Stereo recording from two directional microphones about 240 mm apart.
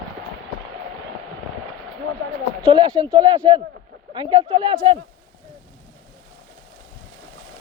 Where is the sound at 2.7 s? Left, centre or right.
Centre.